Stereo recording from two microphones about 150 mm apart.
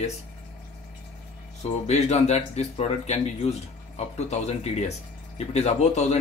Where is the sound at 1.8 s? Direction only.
45° left (ahead or behind).